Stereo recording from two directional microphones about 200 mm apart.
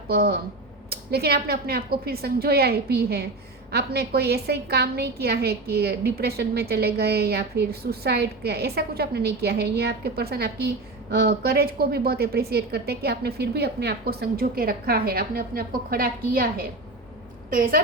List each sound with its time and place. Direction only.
0.1 s a woman's voice: 50° right (ahead or behind)